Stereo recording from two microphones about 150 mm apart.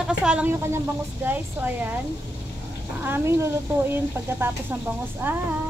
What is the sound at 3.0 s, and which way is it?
Speech, 15° right (ahead or behind).